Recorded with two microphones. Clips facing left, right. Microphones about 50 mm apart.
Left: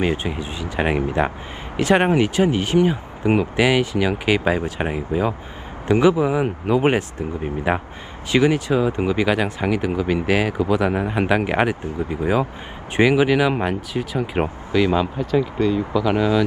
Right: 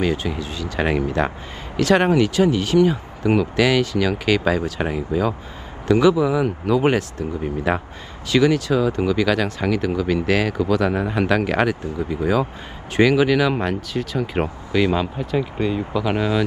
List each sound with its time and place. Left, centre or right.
0.0 s speech: left
14.9 s speech: centre
16.1 s speech: right